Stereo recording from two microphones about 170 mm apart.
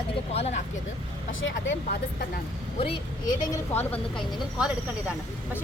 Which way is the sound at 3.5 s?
10° left (ahead or behind).